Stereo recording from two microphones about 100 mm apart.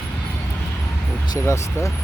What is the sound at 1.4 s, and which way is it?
Speech, 30° left (ahead or behind).